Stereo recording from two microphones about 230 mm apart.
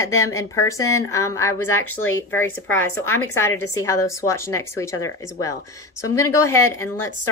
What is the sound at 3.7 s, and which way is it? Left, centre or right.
A woman's voice, centre.